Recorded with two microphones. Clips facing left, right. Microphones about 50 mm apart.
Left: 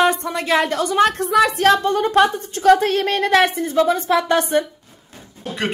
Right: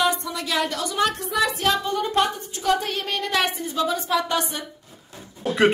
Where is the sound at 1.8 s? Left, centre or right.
Left.